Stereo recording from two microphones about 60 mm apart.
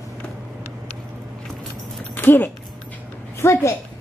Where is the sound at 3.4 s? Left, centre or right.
Left.